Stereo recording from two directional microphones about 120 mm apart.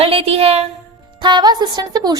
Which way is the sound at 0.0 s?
55° right (ahead or behind).